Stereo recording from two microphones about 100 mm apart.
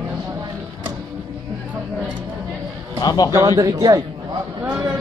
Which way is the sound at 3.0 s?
40° left (ahead or behind).